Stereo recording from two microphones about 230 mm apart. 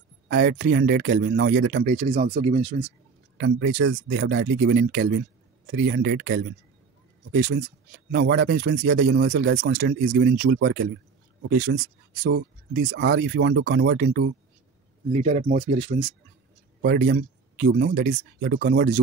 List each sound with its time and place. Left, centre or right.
0.3 s speech: right
2.3 s speech: right
3.3 s speech: right
8.1 s speech: right
10.0 s speech: right
15.1 s speech: right
16.8 s speech: right